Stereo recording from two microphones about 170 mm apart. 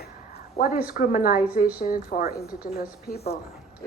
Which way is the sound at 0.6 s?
60° left (ahead or behind).